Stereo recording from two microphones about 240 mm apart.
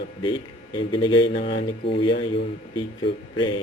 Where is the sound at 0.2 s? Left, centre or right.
Centre.